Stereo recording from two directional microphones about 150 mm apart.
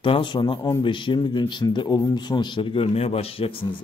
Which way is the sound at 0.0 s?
35° left (ahead or behind).